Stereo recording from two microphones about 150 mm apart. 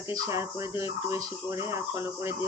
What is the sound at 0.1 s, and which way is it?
Speech, 20° right (ahead or behind).